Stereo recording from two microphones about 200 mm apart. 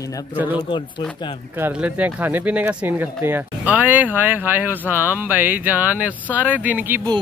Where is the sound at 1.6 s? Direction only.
10° right (ahead or behind).